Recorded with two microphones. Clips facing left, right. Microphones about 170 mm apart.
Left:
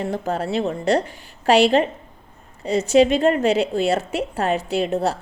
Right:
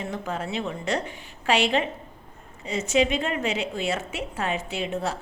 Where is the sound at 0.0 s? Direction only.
35° left (ahead or behind).